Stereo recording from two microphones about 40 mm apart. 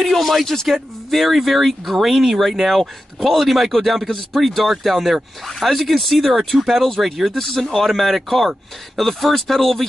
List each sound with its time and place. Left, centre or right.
0.0 s a man's voice: centre
7.3 s a man's voice: centre